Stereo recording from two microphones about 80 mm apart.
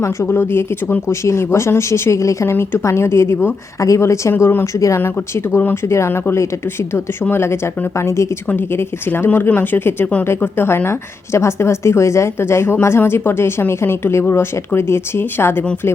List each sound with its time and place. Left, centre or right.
0.0 s speech: left